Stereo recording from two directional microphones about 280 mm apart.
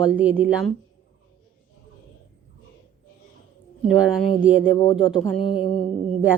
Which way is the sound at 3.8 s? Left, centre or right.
Centre.